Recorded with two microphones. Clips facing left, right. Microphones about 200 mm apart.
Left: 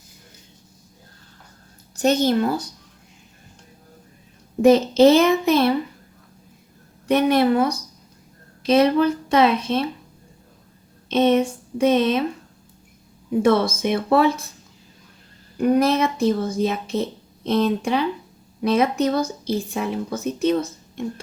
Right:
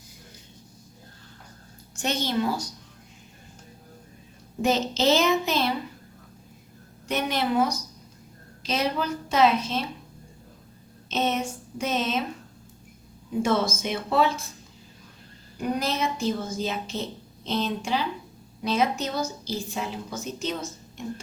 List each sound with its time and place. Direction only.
2.0 s speech: 45° left (ahead or behind)
4.6 s speech: 60° left (ahead or behind)
7.1 s speech: 60° left (ahead or behind)
11.1 s speech: 60° left (ahead or behind)
13.4 s speech: 60° left (ahead or behind)
15.5 s speech: 60° left (ahead or behind)